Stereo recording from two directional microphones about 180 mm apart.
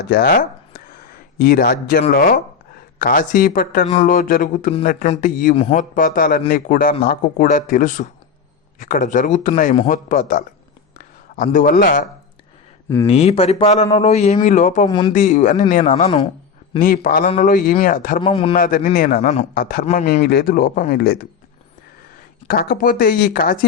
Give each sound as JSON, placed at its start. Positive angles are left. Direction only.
{"t": 0.0, "sound": "a man's voice", "side_deg": 60}
{"t": 5.5, "sound": "speech", "side_deg": 40}
{"t": 11.5, "sound": "speech", "side_deg": 50}
{"t": 13.1, "sound": "speech", "side_deg": 35}
{"t": 14.8, "sound": "speech", "side_deg": 25}
{"t": 15.1, "sound": "speech", "side_deg": 45}
{"t": 18.2, "sound": "speech", "side_deg": 30}
{"t": 18.5, "sound": "speech", "side_deg": 50}
{"t": 19.5, "sound": "a man's voice", "side_deg": 55}
{"t": 19.8, "sound": "speech", "side_deg": 40}
{"t": 20.2, "sound": "a man's voice", "side_deg": 60}
{"t": 22.4, "sound": "speech", "side_deg": 55}